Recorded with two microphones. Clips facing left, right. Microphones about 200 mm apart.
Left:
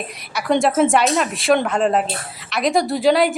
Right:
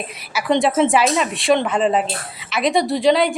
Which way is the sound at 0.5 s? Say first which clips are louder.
Even; centre (ahead or behind).